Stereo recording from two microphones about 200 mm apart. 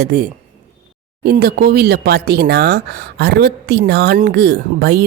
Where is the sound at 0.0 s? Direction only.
50° right (ahead or behind).